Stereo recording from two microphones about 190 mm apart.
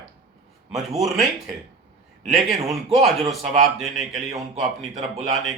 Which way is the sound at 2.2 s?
Centre (ahead or behind).